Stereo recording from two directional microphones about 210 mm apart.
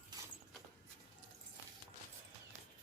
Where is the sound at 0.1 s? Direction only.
20° right (ahead or behind).